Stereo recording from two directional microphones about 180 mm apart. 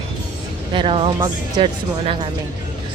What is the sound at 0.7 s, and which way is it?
Speech, 30° right (ahead or behind).